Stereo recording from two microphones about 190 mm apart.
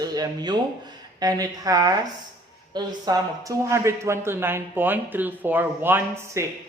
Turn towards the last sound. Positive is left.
turn(degrees=-15)  # may be behind; listen again after turning